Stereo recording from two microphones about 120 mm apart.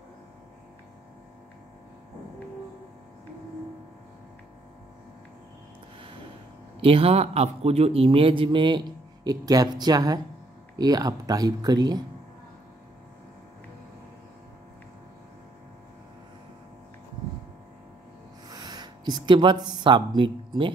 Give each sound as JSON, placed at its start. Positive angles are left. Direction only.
{"t": 6.8, "sound": "a man's voice", "side_deg": -50}
{"t": 18.5, "sound": "speech", "side_deg": -35}